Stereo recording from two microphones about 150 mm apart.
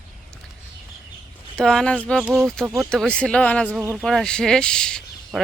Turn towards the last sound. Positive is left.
turn(degrees=0)  # may be behind; listen again after turning